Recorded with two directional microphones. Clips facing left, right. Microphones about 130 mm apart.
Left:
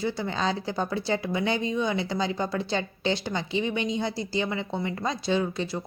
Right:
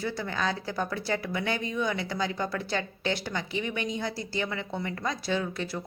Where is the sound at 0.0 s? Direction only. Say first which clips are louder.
Left 3 dB; 20° left (ahead or behind).